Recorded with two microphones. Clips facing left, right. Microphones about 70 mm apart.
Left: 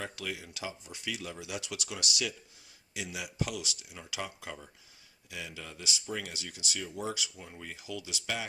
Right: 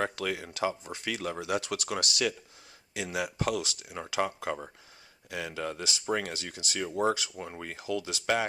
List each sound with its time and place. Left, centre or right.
0.0 s speech: right